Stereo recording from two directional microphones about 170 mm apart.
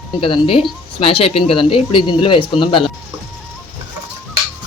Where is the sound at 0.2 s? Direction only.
30° left (ahead or behind).